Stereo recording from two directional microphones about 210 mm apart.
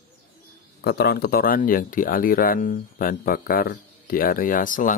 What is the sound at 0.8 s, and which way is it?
Speech, 50° left (ahead or behind).